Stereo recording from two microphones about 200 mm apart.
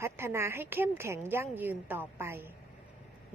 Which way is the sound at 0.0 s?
10° right (ahead or behind).